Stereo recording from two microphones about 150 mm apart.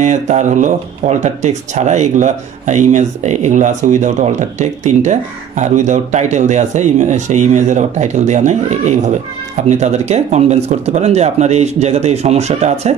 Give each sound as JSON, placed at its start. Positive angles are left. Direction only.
{"t": 0.0, "sound": "speech", "side_deg": -50}